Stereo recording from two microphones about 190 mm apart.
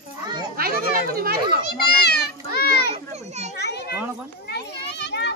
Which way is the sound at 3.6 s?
60° left (ahead or behind).